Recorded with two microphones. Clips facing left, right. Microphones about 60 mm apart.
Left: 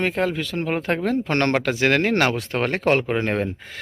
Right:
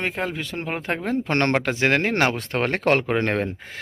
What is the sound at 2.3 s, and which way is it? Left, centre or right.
Speech, right.